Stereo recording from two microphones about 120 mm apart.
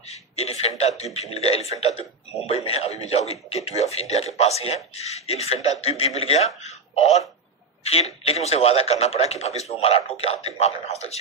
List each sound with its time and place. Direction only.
0.1 s a man's voice: 60° left (ahead or behind)